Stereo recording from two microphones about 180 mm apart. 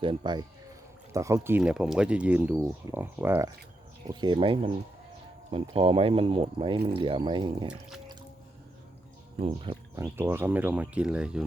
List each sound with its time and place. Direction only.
0.0 s speech: 30° right (ahead or behind)
5.7 s speech: 30° right (ahead or behind)
7.7 s speech: centre (ahead or behind)
9.4 s speech: 30° right (ahead or behind)
9.9 s speech: 15° right (ahead or behind)